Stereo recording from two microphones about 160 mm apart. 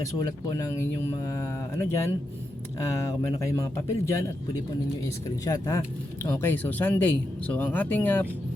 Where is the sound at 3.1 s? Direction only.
20° left (ahead or behind).